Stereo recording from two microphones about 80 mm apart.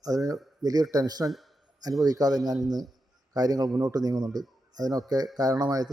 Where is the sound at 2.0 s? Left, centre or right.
Right.